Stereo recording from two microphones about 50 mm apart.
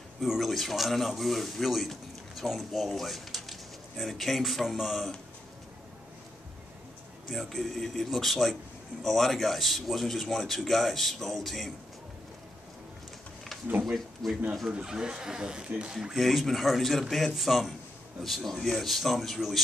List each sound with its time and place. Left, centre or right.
0.2 s speech: centre
7.2 s speech: centre
13.9 s speech: centre
14.7 s speech: centre